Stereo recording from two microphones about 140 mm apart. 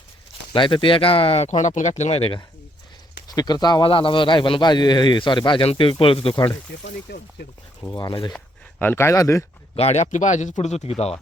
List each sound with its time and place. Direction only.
0.5 s a man's voice: 35° left (ahead or behind)
1.5 s speech: 60° left (ahead or behind); by 2.4 s 45° left (ahead or behind)
3.2 s a man's voice: 30° left (ahead or behind)
7.8 s a man's voice: 30° left (ahead or behind)
8.8 s speech: 15° left (ahead or behind)
9.7 s speech: 50° left (ahead or behind)